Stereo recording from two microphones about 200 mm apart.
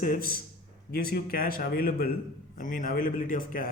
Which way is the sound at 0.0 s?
45° left (ahead or behind).